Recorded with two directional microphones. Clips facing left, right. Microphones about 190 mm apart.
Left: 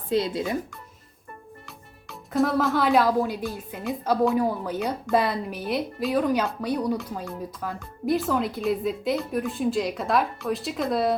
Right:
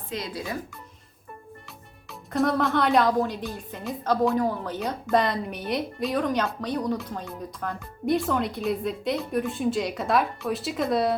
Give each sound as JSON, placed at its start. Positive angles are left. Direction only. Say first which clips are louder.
{"t": 0.1, "sound": "speech", "louder": "left 8 dB", "side_deg": 30}
{"t": 1.6, "sound": "speech", "louder": "left 1 dB", "side_deg": 0}